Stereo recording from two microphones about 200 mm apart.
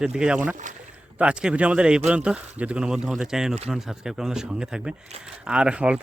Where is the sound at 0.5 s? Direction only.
40° right (ahead or behind).